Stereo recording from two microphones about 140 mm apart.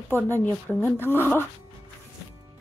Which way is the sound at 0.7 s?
15° left (ahead or behind).